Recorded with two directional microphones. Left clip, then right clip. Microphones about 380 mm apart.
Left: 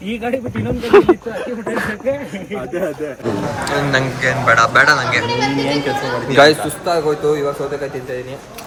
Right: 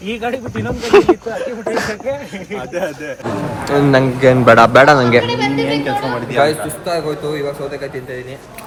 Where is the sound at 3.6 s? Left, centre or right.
Centre.